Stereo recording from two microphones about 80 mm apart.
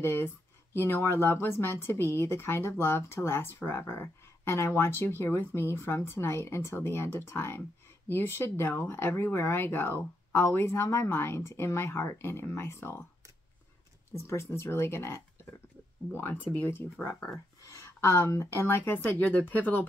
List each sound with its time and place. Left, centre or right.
0.0 s speech: left
14.1 s speech: left
17.6 s speech: left